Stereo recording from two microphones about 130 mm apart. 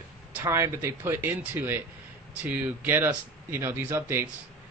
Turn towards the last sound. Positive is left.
turn(degrees=-15)  # may be behind; listen again after turning